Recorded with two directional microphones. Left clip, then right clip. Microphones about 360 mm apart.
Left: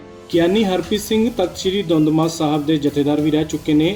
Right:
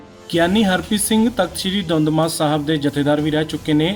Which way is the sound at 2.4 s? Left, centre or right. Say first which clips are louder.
Even; right.